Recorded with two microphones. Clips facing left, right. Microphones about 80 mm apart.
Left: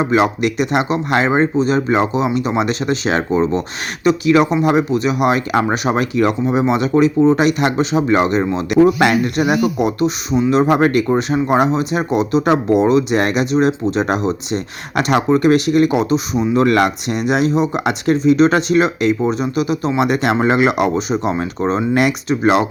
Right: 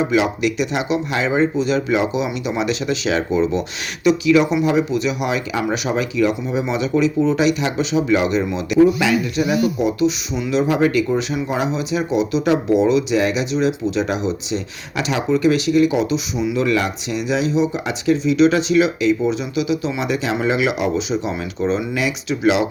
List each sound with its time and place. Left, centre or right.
0.0 s speech: left